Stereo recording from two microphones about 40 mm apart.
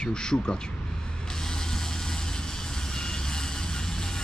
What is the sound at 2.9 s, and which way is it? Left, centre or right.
Vehicle, centre.